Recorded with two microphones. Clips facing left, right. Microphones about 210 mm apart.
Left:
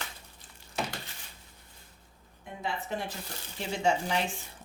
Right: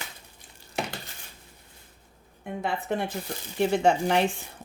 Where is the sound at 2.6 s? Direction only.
55° right (ahead or behind).